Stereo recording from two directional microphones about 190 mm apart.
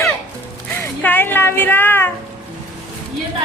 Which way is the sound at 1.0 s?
10° left (ahead or behind).